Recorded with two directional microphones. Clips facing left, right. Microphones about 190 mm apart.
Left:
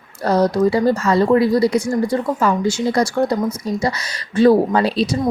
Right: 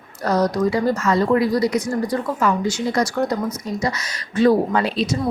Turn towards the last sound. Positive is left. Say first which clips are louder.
# left 3 dB
turn(degrees=35)  # may be behind; listen again after turning